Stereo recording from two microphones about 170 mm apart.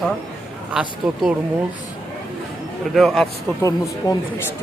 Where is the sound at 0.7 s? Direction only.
5° right (ahead or behind).